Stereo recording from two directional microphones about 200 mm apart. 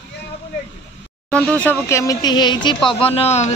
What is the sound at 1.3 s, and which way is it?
A man's voice, 5° left (ahead or behind).